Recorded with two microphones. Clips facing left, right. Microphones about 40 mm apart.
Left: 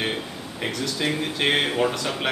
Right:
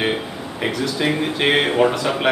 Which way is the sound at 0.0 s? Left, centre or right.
Centre.